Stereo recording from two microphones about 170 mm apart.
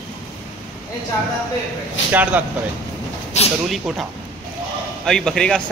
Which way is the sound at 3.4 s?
40° left (ahead or behind).